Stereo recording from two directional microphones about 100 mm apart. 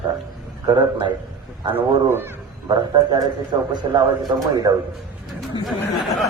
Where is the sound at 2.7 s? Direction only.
45° right (ahead or behind).